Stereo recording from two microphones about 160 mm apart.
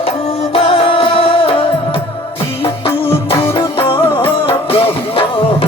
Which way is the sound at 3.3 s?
25° left (ahead or behind).